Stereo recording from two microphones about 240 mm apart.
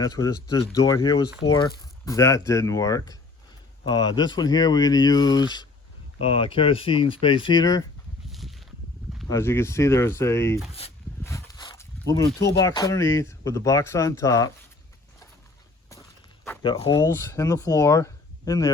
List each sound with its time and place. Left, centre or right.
0.0 s speech: centre
8.3 s a sound: centre
9.3 s speech: centre
11.2 s a sound: centre
12.5 s speech: centre
16.6 s speech: left